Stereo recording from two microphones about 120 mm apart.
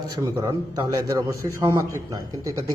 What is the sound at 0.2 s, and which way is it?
A man's voice, 25° right (ahead or behind).